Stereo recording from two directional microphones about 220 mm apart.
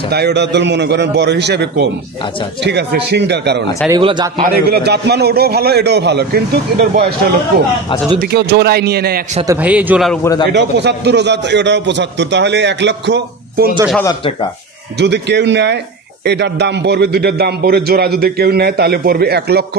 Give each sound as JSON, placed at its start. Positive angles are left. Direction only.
{"t": 0.1, "sound": "a man's voice", "side_deg": -50}
{"t": 3.9, "sound": "a man's voice", "side_deg": -20}
{"t": 4.6, "sound": "a man's voice", "side_deg": -45}
{"t": 9.5, "sound": "a man's voice", "side_deg": -5}
{"t": 10.2, "sound": "speech", "side_deg": 15}
{"t": 10.5, "sound": "a man's voice", "side_deg": -50}
{"t": 15.0, "sound": "a man's voice", "side_deg": -50}